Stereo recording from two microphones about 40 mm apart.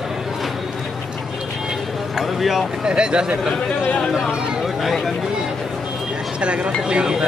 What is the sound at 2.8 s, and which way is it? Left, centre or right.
Speech, right.